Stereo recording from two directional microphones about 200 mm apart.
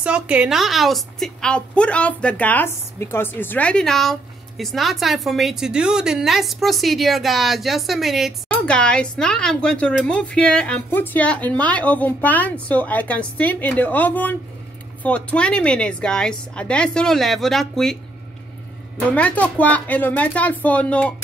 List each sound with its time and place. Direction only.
0.0 s a woman's voice: 5° right (ahead or behind)
18.9 s a woman's voice: 5° left (ahead or behind)